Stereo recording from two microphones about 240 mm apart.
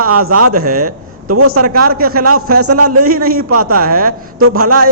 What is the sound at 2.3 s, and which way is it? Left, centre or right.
Speech, right.